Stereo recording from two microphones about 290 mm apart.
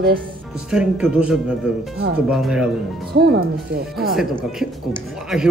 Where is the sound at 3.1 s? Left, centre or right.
Right.